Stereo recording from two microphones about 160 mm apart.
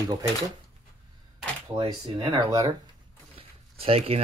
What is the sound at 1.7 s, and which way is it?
Speech, 25° right (ahead or behind).